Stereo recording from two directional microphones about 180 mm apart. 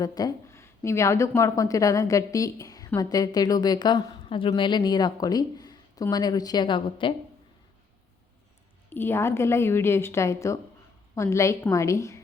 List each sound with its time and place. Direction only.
0.0 s a woman's voice: 20° left (ahead or behind)
8.9 s a woman's voice: 10° left (ahead or behind)